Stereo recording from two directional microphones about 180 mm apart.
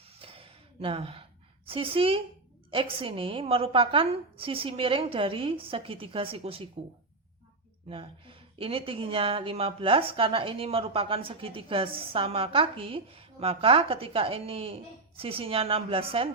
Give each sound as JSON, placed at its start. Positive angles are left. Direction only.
{"t": 0.2, "sound": "a sound", "side_deg": -30}
{"t": 1.6, "sound": "a woman's voice", "side_deg": -30}
{"t": 7.9, "sound": "speech", "side_deg": -30}